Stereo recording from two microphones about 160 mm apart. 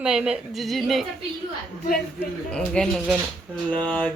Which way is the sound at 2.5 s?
5° left (ahead or behind).